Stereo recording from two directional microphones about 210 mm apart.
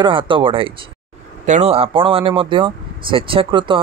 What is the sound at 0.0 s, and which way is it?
Speech, 25° right (ahead or behind).